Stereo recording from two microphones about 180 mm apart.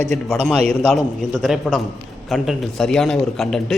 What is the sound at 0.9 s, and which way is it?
A man's voice, centre (ahead or behind).